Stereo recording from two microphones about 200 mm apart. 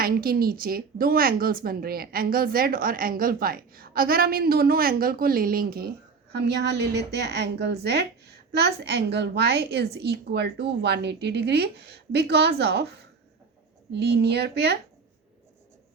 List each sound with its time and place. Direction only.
0.0 s a woman's voice: 50° right (ahead or behind)
13.9 s a woman's voice: 55° right (ahead or behind)